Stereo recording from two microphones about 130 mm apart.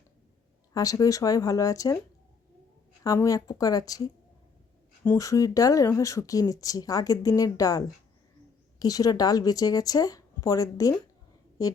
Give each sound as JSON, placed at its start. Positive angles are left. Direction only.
{"t": 0.7, "sound": "speech", "side_deg": 25}
{"t": 3.0, "sound": "speech", "side_deg": 25}
{"t": 5.0, "sound": "speech", "side_deg": 25}